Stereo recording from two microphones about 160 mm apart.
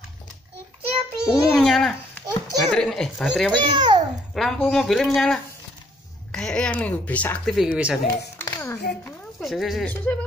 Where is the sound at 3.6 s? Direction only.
30° right (ahead or behind).